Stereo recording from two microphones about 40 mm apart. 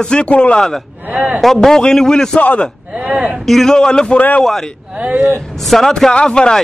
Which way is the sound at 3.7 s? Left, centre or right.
Centre.